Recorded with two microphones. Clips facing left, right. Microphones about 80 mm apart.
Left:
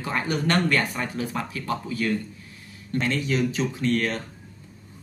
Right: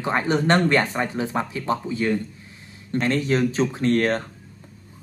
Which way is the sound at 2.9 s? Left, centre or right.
Right.